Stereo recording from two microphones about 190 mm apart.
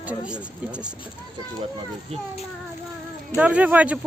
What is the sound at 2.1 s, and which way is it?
Speech, 30° right (ahead or behind).